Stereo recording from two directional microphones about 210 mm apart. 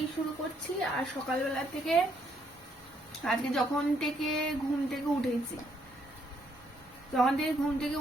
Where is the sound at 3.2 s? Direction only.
Centre (ahead or behind).